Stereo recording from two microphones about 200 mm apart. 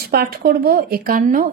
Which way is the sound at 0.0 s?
50° right (ahead or behind).